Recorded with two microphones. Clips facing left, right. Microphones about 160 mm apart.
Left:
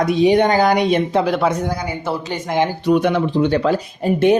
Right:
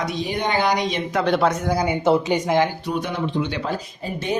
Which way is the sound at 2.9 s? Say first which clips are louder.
Left 10 dB; 80° left.